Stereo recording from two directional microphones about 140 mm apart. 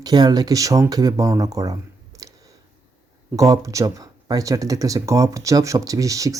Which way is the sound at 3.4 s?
25° right (ahead or behind).